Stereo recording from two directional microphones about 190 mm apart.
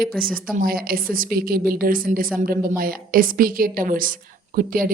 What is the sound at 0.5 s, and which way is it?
A woman's voice, 50° right (ahead or behind).